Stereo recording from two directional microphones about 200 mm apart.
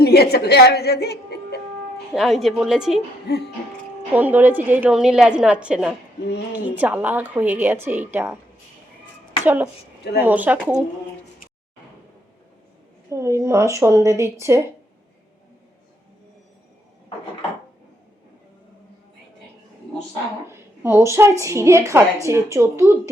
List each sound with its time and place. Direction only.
0.0 s a woman's voice: 50° left (ahead or behind)
2.1 s a woman's voice: centre (ahead or behind)
3.3 s a sound: 55° left (ahead or behind)
4.1 s a woman's voice: 10° right (ahead or behind)
9.4 s a woman's voice: 10° right (ahead or behind)
13.1 s a woman's voice: 15° right (ahead or behind)
20.5 s a woman's voice: 10° right (ahead or behind)